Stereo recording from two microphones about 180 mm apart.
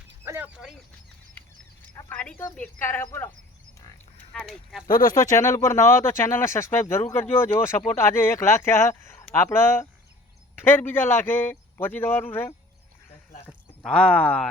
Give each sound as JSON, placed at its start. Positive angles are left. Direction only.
{"t": 0.3, "sound": "a sound", "side_deg": -10}
{"t": 2.0, "sound": "a man's voice", "side_deg": 10}
{"t": 4.4, "sound": "speech", "side_deg": 0}
{"t": 5.0, "sound": "a man's voice", "side_deg": 20}